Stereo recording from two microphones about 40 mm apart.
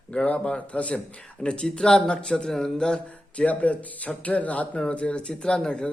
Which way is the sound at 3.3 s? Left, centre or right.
Left.